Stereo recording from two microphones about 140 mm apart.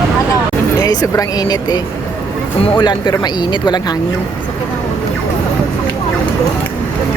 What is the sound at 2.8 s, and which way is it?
Speech, 30° left (ahead or behind).